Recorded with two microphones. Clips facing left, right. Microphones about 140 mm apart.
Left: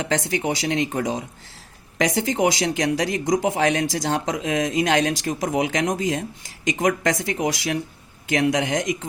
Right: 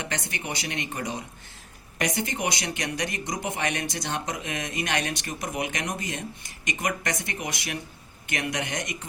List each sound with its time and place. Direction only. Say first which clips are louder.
0.1 s speech: left 10 dB; 90° left